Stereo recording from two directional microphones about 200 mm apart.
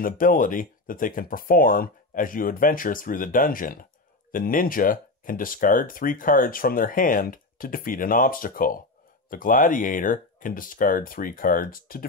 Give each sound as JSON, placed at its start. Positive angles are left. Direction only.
{"t": 0.0, "sound": "speech", "side_deg": 45}